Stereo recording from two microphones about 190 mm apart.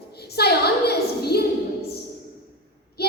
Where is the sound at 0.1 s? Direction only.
55° left (ahead or behind).